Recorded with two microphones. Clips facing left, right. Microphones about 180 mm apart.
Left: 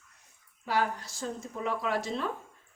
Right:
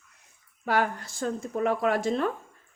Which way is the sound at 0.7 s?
55° right (ahead or behind).